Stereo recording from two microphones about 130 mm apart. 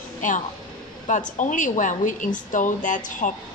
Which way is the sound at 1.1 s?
75° left (ahead or behind).